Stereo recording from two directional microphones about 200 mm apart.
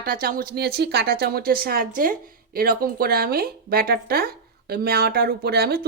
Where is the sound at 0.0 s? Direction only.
50° right (ahead or behind).